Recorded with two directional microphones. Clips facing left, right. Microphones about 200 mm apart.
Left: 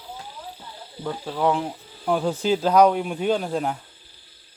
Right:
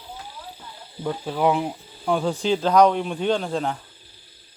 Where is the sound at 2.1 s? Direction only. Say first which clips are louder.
Even; 5° left (ahead or behind).